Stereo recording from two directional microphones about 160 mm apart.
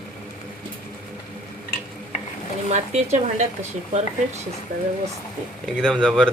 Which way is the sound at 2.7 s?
45° right (ahead or behind).